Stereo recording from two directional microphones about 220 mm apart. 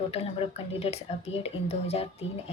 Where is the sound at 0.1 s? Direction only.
30° left (ahead or behind).